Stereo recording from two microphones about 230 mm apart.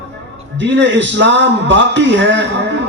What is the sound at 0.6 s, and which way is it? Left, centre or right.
A man's voice, right.